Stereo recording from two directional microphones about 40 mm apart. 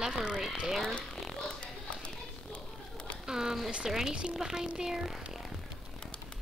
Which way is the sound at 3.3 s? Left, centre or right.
Centre.